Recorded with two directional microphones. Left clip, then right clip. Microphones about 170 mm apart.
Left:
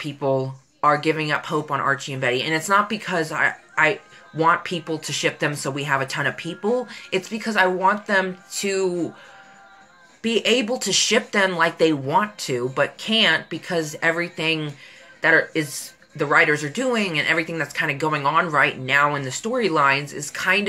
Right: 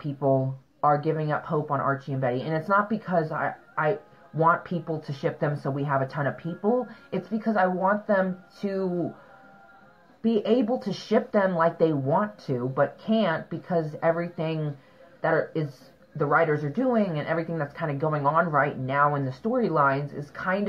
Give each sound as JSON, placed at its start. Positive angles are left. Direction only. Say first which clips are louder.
{"t": 0.0, "sound": "speech", "louder": "left 2 dB", "side_deg": 20}
{"t": 10.3, "sound": "a woman's voice", "louder": "left 4 dB", "side_deg": 15}